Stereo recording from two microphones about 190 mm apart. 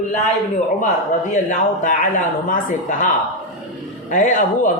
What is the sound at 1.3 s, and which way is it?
A man's voice, 40° left (ahead or behind).